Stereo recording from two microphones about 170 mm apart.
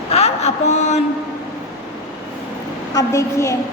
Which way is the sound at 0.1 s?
40° left (ahead or behind).